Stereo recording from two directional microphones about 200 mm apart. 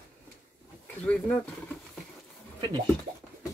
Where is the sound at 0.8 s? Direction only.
5° left (ahead or behind).